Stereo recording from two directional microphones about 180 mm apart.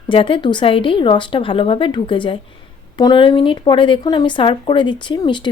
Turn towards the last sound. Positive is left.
turn(degrees=25)  # may be behind; listen again after turning